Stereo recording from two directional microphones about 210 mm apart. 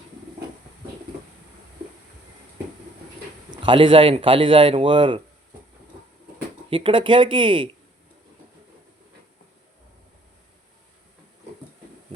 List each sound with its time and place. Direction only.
3.5 s speech: 20° right (ahead or behind)
6.7 s speech: 25° right (ahead or behind)